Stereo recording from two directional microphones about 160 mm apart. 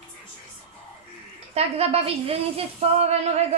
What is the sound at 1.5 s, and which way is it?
Speech, 40° right (ahead or behind).